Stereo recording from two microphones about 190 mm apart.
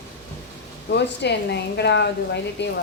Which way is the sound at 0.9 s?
60° left (ahead or behind).